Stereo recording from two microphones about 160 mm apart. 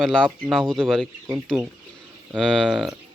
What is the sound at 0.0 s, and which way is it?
Speech, 5° left (ahead or behind).